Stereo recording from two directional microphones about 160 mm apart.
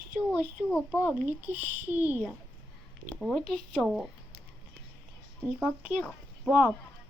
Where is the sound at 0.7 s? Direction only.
5° left (ahead or behind).